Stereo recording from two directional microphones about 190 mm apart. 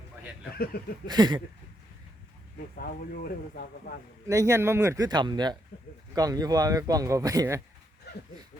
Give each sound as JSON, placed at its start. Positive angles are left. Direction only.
{"t": 1.0, "sound": "speech", "side_deg": -20}
{"t": 2.7, "sound": "speech", "side_deg": 50}
{"t": 4.3, "sound": "speech", "side_deg": -15}
{"t": 8.1, "sound": "a sound", "side_deg": 60}